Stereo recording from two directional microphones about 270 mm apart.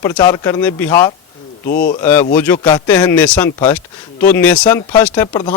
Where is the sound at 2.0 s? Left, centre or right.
Centre.